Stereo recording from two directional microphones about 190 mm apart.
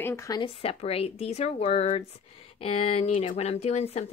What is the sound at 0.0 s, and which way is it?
A woman's voice, 15° left (ahead or behind).